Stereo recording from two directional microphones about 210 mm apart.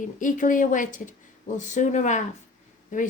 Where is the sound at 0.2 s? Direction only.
40° left (ahead or behind).